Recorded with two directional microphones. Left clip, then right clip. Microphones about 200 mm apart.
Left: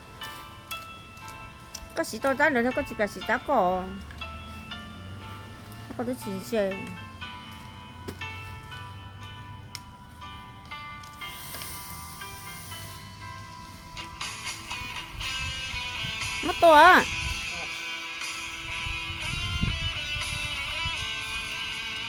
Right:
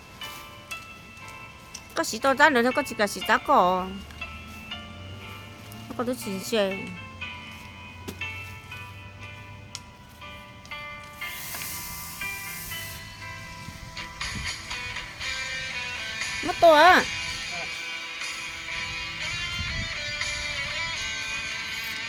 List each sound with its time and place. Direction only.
2.0 s speech: 10° right (ahead or behind)
6.0 s speech: 10° right (ahead or behind)
8.2 s music: 35° left (ahead or behind)
10.7 s music: 40° left (ahead or behind)
13.9 s music: 40° left (ahead or behind)
16.6 s speech: centre (ahead or behind)
17.1 s music: 40° left (ahead or behind)